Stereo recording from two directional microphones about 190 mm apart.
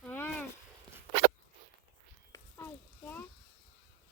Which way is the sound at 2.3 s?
10° left (ahead or behind).